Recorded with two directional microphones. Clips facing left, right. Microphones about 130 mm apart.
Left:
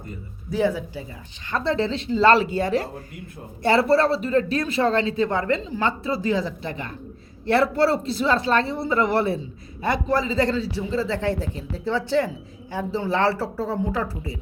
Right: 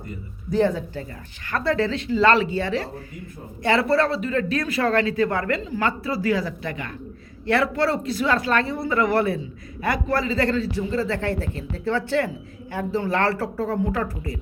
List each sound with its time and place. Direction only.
0.5 s a woman's voice: 5° left (ahead or behind)
1.5 s speech: 25° left (ahead or behind); by 2.9 s 45° left (ahead or behind)
3.6 s a woman's voice: 35° left (ahead or behind); by 11.6 s 10° left (ahead or behind)
13.0 s a woman's voice: 10° left (ahead or behind)